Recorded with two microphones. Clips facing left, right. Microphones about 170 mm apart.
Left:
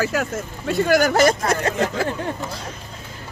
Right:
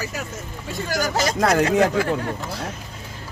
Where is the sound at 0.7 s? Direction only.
60° left (ahead or behind).